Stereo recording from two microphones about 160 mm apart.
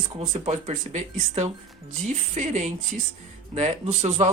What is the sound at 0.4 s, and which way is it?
Speech, 45° right (ahead or behind).